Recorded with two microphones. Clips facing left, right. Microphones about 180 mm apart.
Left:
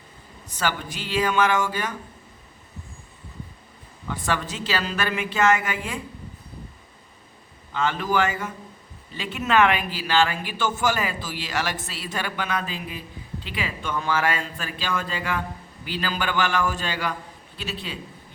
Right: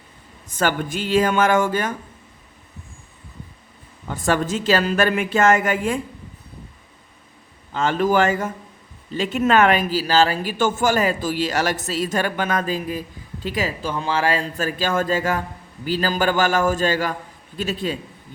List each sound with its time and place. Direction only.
0.4 s speech: 50° right (ahead or behind)
4.1 s speech: 45° right (ahead or behind)
7.7 s speech: 45° right (ahead or behind)